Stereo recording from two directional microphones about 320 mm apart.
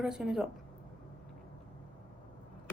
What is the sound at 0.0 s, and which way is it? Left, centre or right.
Speech, centre.